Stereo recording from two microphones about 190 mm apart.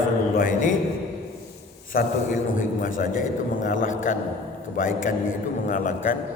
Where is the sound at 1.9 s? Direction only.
45° left (ahead or behind).